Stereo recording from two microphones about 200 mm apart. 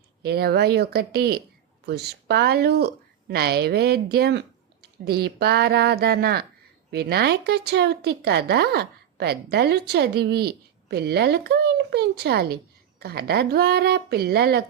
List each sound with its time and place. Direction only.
0.2 s speech: 50° right (ahead or behind)